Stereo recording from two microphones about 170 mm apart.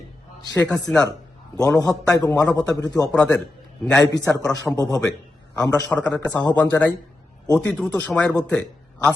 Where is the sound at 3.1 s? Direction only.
5° left (ahead or behind).